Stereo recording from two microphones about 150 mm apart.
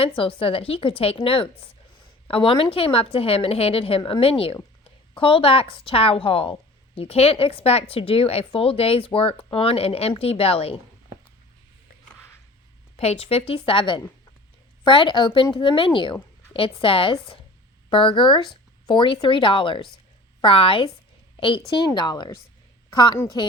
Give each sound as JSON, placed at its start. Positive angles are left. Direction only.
{"t": 0.0, "sound": "a woman's voice", "side_deg": 40}
{"t": 13.0, "sound": "a woman's voice", "side_deg": 40}